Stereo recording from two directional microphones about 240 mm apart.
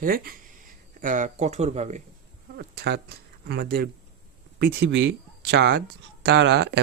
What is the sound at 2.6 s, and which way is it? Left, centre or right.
Speech, right.